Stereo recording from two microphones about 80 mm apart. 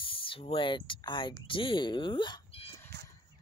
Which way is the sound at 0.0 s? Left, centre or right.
Left.